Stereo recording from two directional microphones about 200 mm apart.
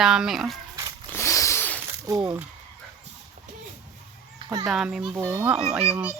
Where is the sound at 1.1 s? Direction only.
15° left (ahead or behind).